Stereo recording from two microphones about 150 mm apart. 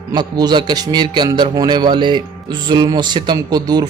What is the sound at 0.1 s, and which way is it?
A man's voice, 25° right (ahead or behind).